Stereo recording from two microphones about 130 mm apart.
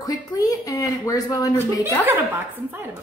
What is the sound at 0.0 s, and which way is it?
Speech, 30° left (ahead or behind).